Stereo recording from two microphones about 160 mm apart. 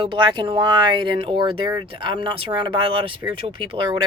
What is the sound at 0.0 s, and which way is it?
Speech, 30° right (ahead or behind).